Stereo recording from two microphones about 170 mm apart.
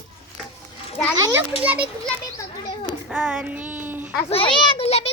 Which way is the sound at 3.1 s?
5° right (ahead or behind).